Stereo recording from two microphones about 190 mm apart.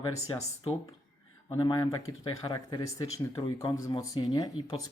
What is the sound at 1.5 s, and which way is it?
Speech, 25° left (ahead or behind).